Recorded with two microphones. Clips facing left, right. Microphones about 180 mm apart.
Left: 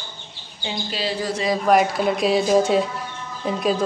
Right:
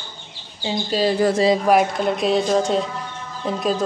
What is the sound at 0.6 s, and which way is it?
Speech, 45° right (ahead or behind).